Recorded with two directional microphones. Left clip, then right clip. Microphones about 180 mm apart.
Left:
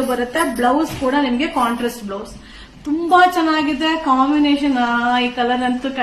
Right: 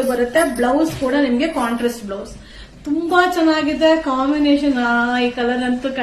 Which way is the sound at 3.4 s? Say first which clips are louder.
Right 3 dB; 20° left (ahead or behind).